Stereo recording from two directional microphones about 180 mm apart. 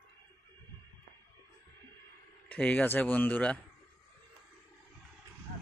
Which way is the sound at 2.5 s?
10° left (ahead or behind).